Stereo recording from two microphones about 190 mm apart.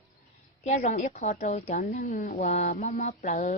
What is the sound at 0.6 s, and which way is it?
Speech, 35° left (ahead or behind).